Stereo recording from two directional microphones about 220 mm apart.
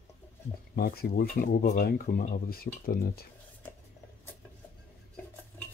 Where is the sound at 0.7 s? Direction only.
45° left (ahead or behind).